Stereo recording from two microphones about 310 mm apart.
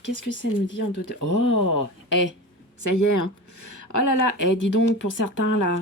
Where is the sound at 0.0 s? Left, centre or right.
Left.